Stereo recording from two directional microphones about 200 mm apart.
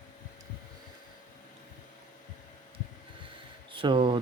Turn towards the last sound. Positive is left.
turn(degrees=-25)  # may be behind; listen again after turning